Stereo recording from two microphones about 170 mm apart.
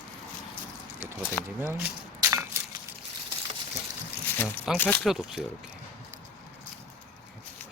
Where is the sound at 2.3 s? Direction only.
15° right (ahead or behind).